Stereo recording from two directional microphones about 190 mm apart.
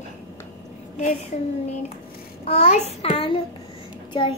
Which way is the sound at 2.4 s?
35° left (ahead or behind).